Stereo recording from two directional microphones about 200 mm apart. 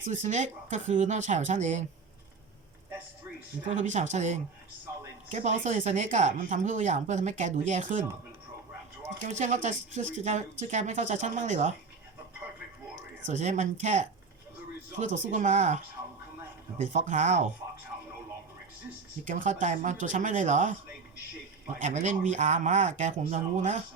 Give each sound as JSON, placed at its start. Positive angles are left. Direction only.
{"t": 0.0, "sound": "speech", "side_deg": -40}
{"t": 3.7, "sound": "speech", "side_deg": -35}
{"t": 9.2, "sound": "speech", "side_deg": -35}
{"t": 13.2, "sound": "speech", "side_deg": -35}
{"t": 19.2, "sound": "speech", "side_deg": -40}
{"t": 21.8, "sound": "speech", "side_deg": -40}